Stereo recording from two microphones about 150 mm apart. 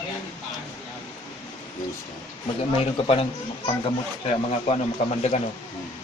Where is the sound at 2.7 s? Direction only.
40° left (ahead or behind).